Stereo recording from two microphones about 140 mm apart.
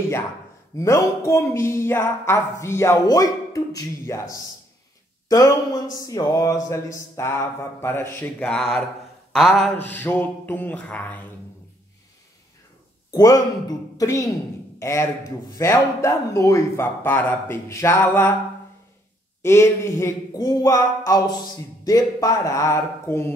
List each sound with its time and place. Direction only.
0.7 s speech: 20° left (ahead or behind); by 8.8 s centre (ahead or behind)
9.3 s mantra: 5° left (ahead or behind)
13.1 s speech: 25° left (ahead or behind)
19.4 s speech: 20° left (ahead or behind)